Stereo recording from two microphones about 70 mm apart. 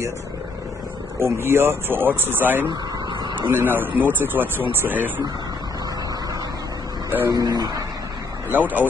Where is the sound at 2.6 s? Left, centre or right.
Right.